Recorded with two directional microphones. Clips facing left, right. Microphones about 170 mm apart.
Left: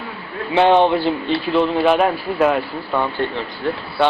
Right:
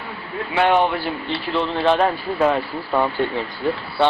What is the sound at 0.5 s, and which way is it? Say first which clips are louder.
Speech: left 4 dB; 25° left (ahead or behind).